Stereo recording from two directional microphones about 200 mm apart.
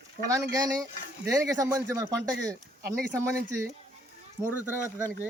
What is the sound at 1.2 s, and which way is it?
Speech, 15° right (ahead or behind).